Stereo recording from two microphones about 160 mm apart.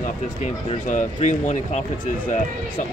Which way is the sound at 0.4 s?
45° left (ahead or behind).